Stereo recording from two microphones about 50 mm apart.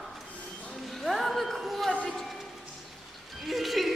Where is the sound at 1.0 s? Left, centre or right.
Centre.